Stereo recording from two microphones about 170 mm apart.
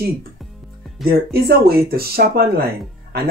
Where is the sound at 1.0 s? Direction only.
65° right (ahead or behind).